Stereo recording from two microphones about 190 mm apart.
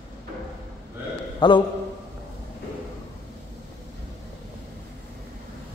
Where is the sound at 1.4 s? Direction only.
25° left (ahead or behind).